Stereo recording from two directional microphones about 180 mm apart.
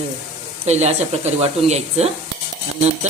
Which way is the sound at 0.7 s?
40° right (ahead or behind).